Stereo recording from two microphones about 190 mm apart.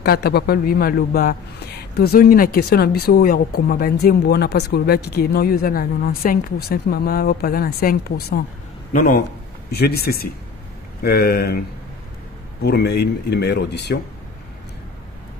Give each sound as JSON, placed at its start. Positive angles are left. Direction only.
{"t": 0.0, "sound": "a man's voice", "side_deg": 55}
{"t": 12.6, "sound": "speech", "side_deg": 60}